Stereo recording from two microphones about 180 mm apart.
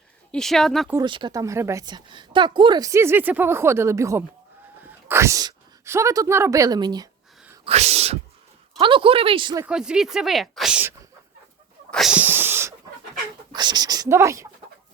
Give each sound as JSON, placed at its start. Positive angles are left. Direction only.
{"t": 0.3, "sound": "speech", "side_deg": 0}
{"t": 1.0, "sound": "a woman's voice", "side_deg": -25}
{"t": 7.6, "sound": "speech", "side_deg": -35}
{"t": 9.6, "sound": "speech", "side_deg": -5}
{"t": 11.9, "sound": "cat", "side_deg": 0}
{"t": 13.5, "sound": "speech", "side_deg": -25}